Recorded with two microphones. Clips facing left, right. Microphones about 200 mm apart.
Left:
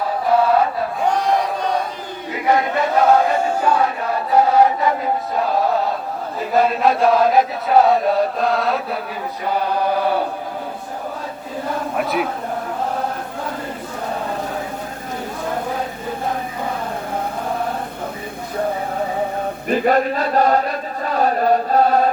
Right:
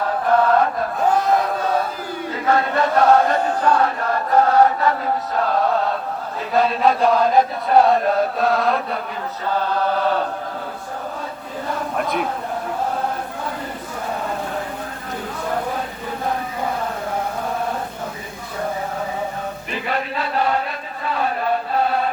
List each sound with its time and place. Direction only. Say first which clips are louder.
0.3 s chant: left 1 dB; 10° left (ahead or behind)
1.0 s chant: right 1 dB; 5° right (ahead or behind)
2.3 s chant: left 2 dB; 15° left (ahead or behind)
9.5 s mantra: left 1 dB; 15° left (ahead or behind)
11.9 s chant: left 2 dB; 5° left (ahead or behind)
19.6 s chant: left 11 dB; 45° left (ahead or behind)